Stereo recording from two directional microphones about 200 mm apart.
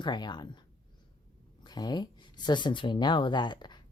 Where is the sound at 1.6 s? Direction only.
20° left (ahead or behind).